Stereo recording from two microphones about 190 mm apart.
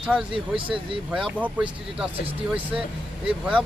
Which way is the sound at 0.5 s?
25° right (ahead or behind).